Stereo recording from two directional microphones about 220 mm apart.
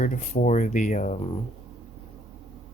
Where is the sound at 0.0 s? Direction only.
35° left (ahead or behind).